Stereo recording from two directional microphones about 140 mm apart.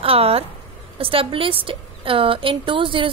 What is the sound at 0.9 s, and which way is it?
A woman's voice, 40° right (ahead or behind).